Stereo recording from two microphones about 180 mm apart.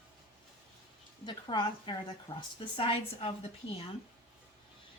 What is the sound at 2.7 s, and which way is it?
Speech, 30° left (ahead or behind).